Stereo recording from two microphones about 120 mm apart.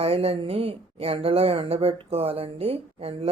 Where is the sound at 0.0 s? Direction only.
55° right (ahead or behind).